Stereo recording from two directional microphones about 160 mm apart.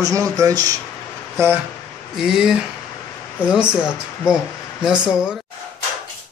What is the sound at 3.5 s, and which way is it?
Speech, 5° right (ahead or behind).